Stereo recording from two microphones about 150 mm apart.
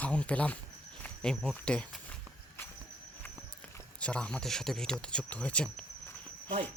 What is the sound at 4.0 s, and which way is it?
Speech, 5° left (ahead or behind).